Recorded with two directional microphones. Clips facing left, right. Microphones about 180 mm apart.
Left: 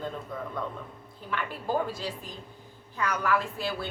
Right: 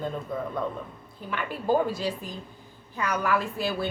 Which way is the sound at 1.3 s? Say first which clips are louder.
Right 5 dB; 15° right (ahead or behind).